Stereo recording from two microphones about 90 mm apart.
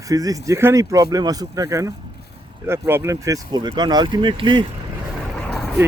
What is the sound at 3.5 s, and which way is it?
Speech, 55° right (ahead or behind).